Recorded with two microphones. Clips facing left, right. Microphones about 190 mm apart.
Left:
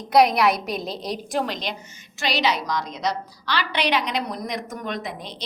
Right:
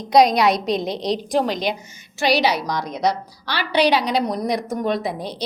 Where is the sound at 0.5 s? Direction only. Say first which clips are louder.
Right 6 dB; 80° right.